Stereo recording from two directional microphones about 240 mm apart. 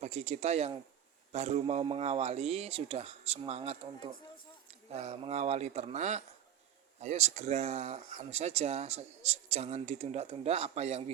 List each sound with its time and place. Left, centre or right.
0.0 s speech: right